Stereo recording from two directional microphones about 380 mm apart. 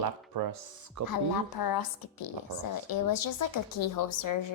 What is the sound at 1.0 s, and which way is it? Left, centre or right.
A woman's voice, left.